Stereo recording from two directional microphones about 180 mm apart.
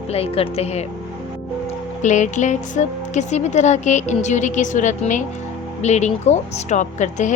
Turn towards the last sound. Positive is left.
turn(degrees=40)  # may be behind; listen again after turning